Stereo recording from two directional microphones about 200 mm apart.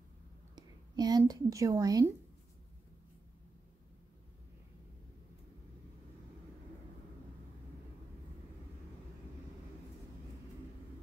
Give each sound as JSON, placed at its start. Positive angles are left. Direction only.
{"t": 0.6, "sound": "a woman's voice", "side_deg": -20}